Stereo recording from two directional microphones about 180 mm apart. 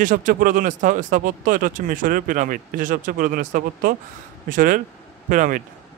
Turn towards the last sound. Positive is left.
turn(degrees=-45)  # may be behind; listen again after turning